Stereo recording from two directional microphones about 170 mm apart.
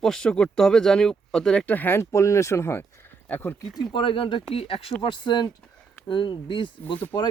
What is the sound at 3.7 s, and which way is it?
Speech, 25° left (ahead or behind).